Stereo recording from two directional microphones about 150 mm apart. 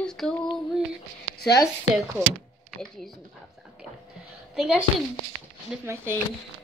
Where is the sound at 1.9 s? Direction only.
Centre (ahead or behind).